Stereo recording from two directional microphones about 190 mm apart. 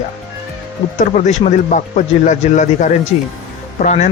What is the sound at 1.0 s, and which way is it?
Speech, 40° left (ahead or behind).